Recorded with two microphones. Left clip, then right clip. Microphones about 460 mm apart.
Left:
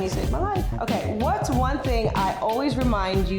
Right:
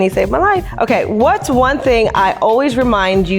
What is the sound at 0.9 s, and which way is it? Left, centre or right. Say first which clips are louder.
Speech: right 12 dB; right.